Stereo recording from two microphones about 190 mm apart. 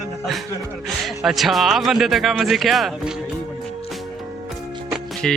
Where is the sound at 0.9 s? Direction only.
Centre (ahead or behind).